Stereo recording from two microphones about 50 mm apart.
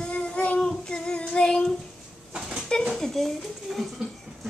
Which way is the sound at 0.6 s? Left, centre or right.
Centre.